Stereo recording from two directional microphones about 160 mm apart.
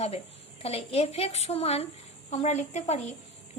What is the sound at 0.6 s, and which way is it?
A woman's voice, 40° left (ahead or behind).